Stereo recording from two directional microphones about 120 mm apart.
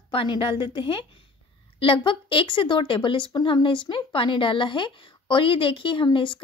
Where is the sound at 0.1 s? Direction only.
45° left (ahead or behind).